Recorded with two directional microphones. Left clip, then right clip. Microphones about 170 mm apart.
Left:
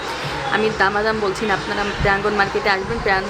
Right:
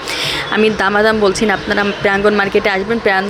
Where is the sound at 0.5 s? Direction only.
40° right (ahead or behind).